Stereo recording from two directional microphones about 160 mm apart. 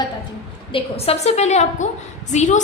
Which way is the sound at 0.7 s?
40° left (ahead or behind).